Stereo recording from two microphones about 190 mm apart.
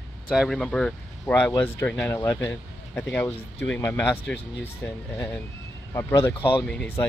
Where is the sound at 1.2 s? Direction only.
15° left (ahead or behind).